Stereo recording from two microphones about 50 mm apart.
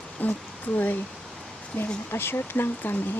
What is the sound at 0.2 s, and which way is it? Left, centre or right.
Speech, left.